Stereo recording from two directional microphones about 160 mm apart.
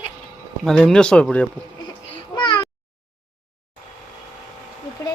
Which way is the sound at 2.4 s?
30° left (ahead or behind).